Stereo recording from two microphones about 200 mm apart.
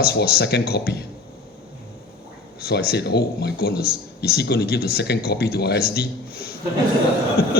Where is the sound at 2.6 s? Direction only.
50° left (ahead or behind).